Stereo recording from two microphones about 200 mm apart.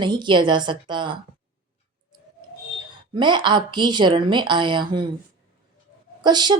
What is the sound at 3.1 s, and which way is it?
Speech, 20° right (ahead or behind).